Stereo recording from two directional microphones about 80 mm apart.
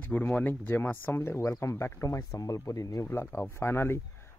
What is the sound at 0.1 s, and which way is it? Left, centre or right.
Speech, centre.